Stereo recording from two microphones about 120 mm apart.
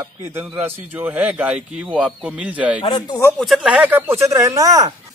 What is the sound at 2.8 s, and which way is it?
Speech, 45° left (ahead or behind).